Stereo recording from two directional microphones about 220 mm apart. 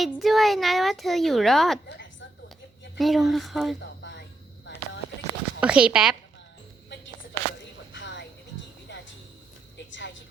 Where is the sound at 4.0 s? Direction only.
55° left (ahead or behind).